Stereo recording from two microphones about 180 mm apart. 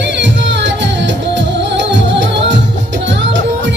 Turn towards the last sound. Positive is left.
turn(degrees=-80)